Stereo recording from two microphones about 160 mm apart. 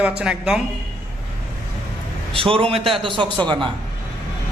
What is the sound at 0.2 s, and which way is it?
Speech, 5° right (ahead or behind).